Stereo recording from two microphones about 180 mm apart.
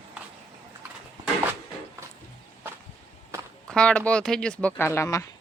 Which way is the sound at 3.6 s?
5° left (ahead or behind).